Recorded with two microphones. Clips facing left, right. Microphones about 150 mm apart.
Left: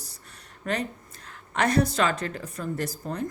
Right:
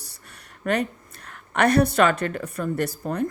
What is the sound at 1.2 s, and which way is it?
A woman's voice, 60° right (ahead or behind).